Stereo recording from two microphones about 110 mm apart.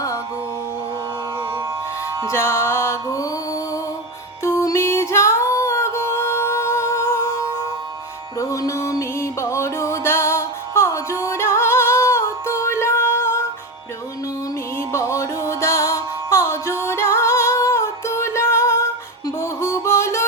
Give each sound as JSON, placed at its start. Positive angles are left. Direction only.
{"t": 2.3, "sound": "music", "side_deg": 25}
{"t": 8.4, "sound": "music", "side_deg": 30}
{"t": 14.8, "sound": "music", "side_deg": 25}